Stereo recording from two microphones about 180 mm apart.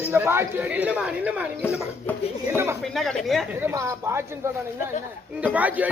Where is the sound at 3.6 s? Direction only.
15° right (ahead or behind).